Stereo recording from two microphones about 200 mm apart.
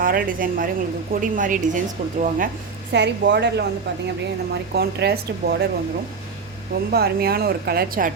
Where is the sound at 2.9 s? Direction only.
60° right (ahead or behind).